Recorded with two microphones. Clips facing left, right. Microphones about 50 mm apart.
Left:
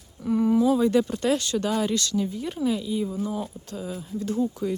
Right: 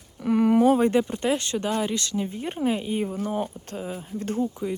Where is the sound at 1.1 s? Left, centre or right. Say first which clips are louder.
Left 1 dB; right.